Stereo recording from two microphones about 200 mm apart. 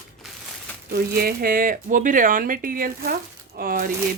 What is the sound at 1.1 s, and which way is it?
Speech, 50° right (ahead or behind).